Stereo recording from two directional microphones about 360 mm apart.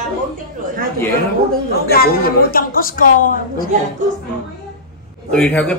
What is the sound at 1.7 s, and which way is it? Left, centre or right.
A woman's voice, left.